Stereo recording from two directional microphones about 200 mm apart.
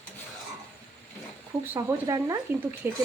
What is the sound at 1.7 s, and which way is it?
Speech, 15° right (ahead or behind).